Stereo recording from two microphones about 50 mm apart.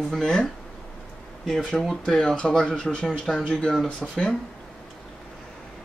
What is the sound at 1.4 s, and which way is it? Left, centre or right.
Speech, centre.